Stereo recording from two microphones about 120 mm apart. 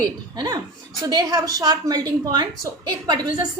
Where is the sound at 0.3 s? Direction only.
35° right (ahead or behind).